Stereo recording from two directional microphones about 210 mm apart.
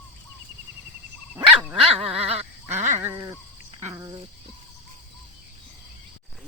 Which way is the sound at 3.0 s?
15° right (ahead or behind).